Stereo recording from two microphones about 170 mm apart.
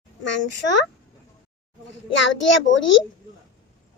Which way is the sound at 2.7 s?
90° left.